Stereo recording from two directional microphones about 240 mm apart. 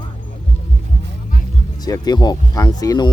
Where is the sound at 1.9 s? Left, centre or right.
Centre.